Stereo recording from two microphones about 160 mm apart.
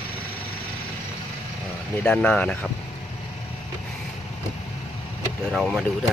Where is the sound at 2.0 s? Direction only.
5° left (ahead or behind).